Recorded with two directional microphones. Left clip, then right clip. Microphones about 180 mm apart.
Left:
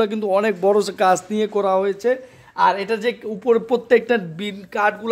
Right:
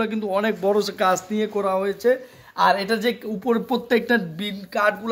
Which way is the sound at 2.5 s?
35° left (ahead or behind).